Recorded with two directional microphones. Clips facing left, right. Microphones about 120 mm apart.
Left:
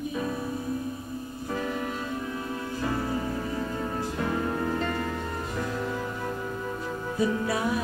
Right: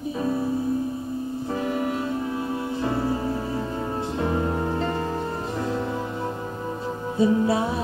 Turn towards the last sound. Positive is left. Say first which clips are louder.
# right 5 dB
turn(degrees=-25)  # may be behind; listen again after turning